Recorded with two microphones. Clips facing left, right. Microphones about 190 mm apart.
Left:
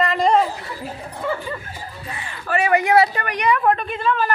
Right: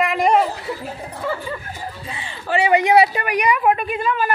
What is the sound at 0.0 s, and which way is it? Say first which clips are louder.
Dog: even; 10° right (ahead or behind).